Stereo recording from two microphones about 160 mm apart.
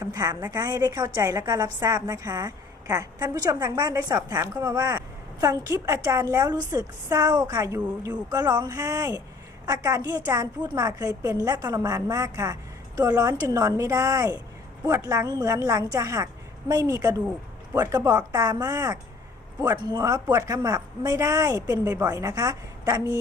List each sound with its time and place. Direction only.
0.0 s a woman's voice: 25° right (ahead or behind)